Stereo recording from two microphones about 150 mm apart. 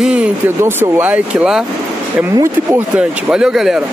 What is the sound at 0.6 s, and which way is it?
Speech, 15° right (ahead or behind).